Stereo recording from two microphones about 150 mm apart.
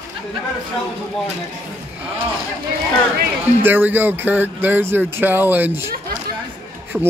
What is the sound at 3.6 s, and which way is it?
Speech, 15° right (ahead or behind).